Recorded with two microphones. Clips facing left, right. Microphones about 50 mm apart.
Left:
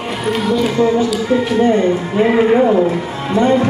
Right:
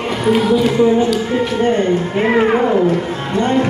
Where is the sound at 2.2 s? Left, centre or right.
Right.